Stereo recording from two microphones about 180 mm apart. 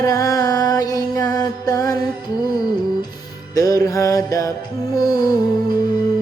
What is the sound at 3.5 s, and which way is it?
Music, 20° left (ahead or behind).